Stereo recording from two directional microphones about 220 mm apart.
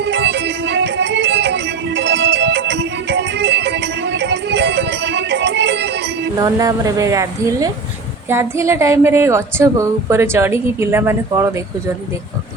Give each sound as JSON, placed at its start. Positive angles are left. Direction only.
{"t": 0.0, "sound": "music", "side_deg": -55}
{"t": 6.3, "sound": "a woman's voice", "side_deg": -15}